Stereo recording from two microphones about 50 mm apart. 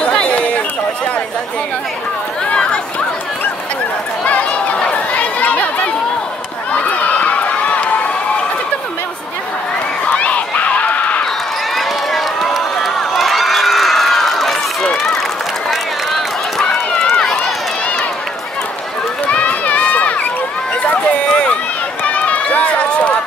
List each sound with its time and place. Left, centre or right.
0.0 s a sound: left
2.5 s chatter: centre
4.2 s chatter: left
6.7 s crowd: left
10.0 s a sound: left
11.7 s run: centre
19.3 s run: left
21.3 s run: centre
22.0 s run: left